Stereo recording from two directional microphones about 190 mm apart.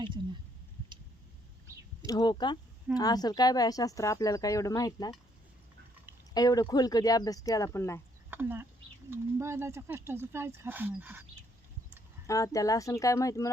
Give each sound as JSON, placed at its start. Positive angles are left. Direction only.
{"t": 2.0, "sound": "a woman's voice", "side_deg": 20}
{"t": 6.3, "sound": "a woman's voice", "side_deg": 20}
{"t": 8.3, "sound": "speech", "side_deg": -10}
{"t": 12.3, "sound": "speech", "side_deg": 15}